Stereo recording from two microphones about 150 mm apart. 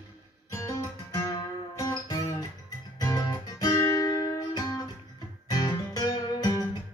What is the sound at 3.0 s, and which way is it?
Guitar, 25° left (ahead or behind).